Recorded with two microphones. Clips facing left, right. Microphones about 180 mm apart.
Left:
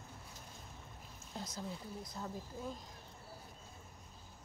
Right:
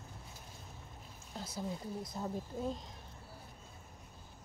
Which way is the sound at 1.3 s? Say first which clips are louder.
Right 2 dB; 5° right (ahead or behind).